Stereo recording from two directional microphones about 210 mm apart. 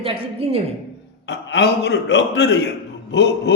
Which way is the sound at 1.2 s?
55° left (ahead or behind).